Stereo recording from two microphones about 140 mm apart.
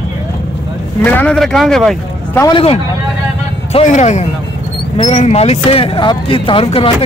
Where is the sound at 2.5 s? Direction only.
40° left (ahead or behind).